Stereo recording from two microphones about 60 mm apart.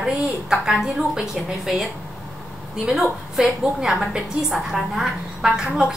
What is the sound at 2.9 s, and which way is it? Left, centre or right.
A woman's voice, centre.